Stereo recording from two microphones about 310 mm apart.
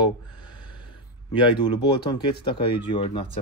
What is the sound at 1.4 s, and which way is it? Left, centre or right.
Speech, centre.